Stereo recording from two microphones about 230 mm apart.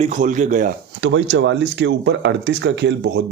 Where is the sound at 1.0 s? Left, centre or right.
Right.